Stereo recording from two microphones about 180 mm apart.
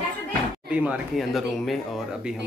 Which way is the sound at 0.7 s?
5° right (ahead or behind).